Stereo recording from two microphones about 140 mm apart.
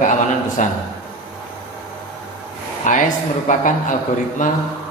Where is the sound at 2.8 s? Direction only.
65° left (ahead or behind).